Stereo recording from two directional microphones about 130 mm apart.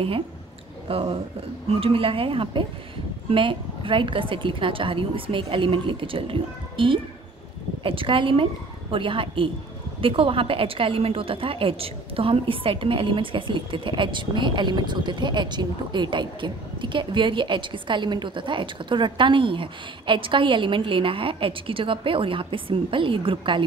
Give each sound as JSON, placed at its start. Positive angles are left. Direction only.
{"t": 0.8, "sound": "a woman's voice", "side_deg": -45}